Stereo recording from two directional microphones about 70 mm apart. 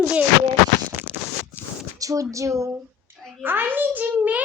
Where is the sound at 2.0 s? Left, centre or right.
Right.